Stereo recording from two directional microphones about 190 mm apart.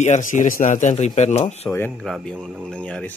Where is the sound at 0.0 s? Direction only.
40° left (ahead or behind).